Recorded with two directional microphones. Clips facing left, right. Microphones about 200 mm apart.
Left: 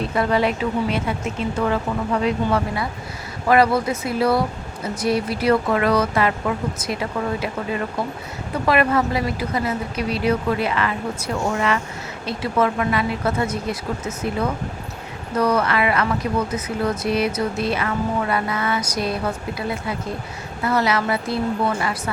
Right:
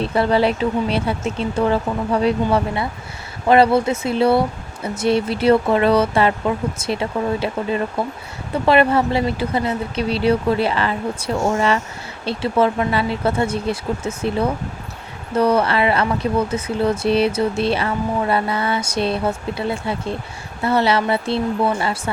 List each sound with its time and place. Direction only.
0.0 s speech: 30° right (ahead or behind)